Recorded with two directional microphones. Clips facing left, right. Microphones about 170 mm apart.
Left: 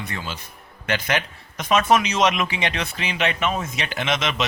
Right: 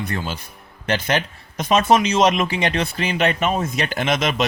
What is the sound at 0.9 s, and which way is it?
Speech, 35° right (ahead or behind).